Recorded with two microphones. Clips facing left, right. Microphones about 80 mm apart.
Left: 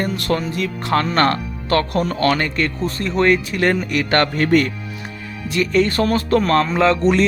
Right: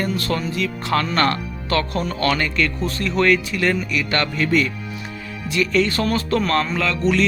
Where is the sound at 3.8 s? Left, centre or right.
Left.